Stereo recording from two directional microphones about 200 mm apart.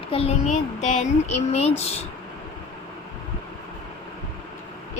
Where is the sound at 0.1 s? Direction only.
30° left (ahead or behind).